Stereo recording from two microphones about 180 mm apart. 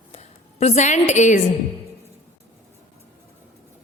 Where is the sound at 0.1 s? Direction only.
35° left (ahead or behind).